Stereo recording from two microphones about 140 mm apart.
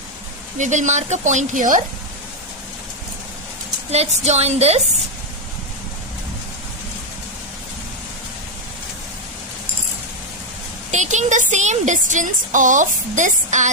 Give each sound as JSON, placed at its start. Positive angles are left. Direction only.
{"t": 0.6, "sound": "speech", "side_deg": -60}
{"t": 3.9, "sound": "a woman's voice", "side_deg": -50}
{"t": 10.9, "sound": "speech", "side_deg": -60}